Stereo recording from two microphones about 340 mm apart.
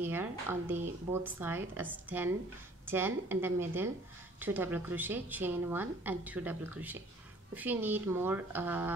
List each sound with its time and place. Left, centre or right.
0.0 s a woman's voice: centre